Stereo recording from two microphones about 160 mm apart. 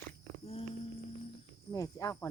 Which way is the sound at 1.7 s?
20° left (ahead or behind).